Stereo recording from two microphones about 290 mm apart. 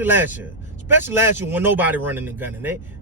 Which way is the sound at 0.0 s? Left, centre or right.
Centre.